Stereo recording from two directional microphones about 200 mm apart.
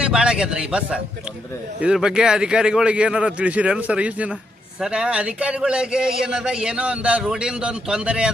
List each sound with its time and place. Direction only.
0.0 s a man's voice: 5° right (ahead or behind)